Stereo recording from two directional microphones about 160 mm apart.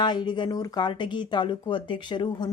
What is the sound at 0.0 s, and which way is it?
Speech, 30° left (ahead or behind).